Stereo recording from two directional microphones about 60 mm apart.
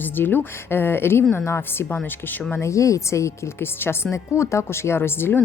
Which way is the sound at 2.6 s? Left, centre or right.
Left.